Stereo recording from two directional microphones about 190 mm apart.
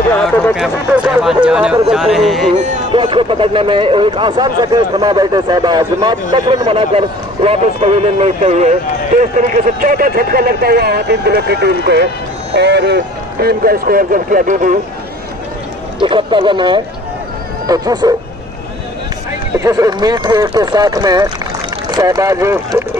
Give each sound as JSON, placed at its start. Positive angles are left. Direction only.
{"t": 0.1, "sound": "speech", "side_deg": 0}
{"t": 2.5, "sound": "music", "side_deg": -40}
{"t": 2.9, "sound": "a man's voice", "side_deg": -25}
{"t": 16.0, "sound": "speech", "side_deg": -25}
{"t": 19.5, "sound": "speech", "side_deg": -15}